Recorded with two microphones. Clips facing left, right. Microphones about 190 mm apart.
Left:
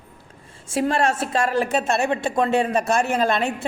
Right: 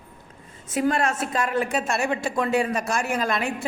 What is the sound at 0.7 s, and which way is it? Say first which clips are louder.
A woman's voice: left 2 dB; 30° left (ahead or behind).